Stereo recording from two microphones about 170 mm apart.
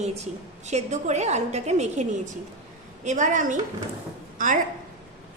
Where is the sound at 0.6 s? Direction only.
45° right (ahead or behind).